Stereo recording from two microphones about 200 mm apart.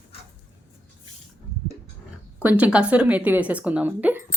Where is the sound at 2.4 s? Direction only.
5° right (ahead or behind).